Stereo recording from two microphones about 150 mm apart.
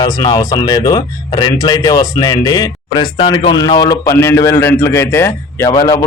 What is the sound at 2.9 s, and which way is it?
A man's voice, 35° left (ahead or behind).